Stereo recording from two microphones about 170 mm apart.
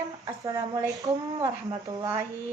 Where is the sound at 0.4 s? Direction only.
20° right (ahead or behind).